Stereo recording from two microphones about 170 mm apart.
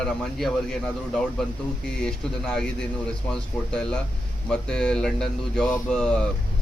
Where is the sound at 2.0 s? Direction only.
5° left (ahead or behind).